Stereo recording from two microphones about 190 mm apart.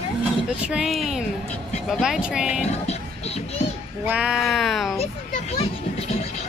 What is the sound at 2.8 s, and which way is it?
Music, 35° left (ahead or behind).